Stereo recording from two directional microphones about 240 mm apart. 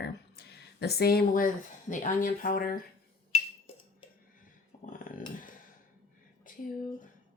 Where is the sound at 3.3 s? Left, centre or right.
Left.